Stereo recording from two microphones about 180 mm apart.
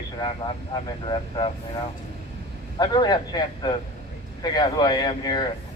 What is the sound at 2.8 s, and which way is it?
A man's voice, 25° left (ahead or behind).